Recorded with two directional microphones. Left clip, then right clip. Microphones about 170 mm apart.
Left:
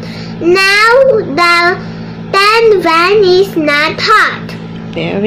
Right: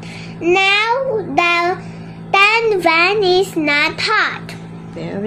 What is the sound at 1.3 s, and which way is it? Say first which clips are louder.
Child singing: left 6 dB; 45° right (ahead or behind).